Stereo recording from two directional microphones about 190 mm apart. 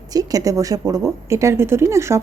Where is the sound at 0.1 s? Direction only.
20° right (ahead or behind).